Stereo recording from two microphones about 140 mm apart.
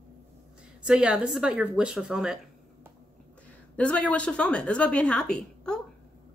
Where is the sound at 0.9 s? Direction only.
5° right (ahead or behind).